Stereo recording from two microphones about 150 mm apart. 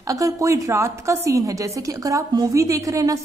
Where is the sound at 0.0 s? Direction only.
20° right (ahead or behind).